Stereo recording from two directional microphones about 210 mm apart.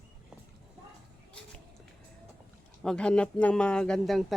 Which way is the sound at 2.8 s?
5° left (ahead or behind).